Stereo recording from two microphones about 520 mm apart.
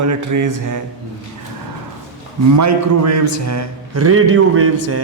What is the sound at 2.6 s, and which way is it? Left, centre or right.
A man's voice, right.